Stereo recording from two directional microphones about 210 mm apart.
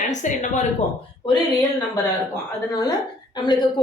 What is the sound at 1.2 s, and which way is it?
A woman's voice, 15° left (ahead or behind).